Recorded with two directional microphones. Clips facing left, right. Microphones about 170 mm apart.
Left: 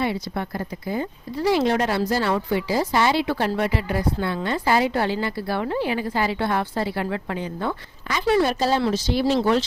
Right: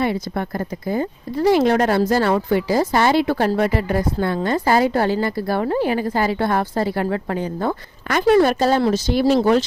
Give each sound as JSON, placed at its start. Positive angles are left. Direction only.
{"t": 0.0, "sound": "speech", "side_deg": -50}